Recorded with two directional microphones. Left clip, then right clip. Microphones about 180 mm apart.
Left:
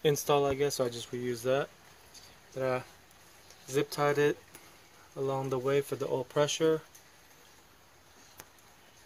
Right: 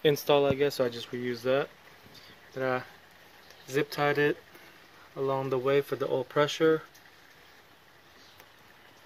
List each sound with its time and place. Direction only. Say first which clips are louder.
0.0 s speech: right 3 dB; 30° left (ahead or behind)
2.5 s speech: right 2 dB; 20° left (ahead or behind)